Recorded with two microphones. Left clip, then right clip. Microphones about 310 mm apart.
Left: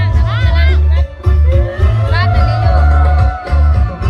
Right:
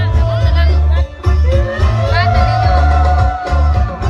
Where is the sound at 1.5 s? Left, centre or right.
Centre.